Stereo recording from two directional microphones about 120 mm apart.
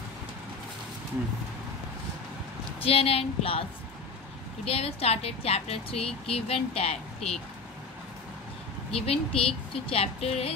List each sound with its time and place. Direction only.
2.8 s a woman's voice: 55° left (ahead or behind)
4.6 s a woman's voice: 55° left (ahead or behind)
8.9 s a woman's voice: 55° left (ahead or behind)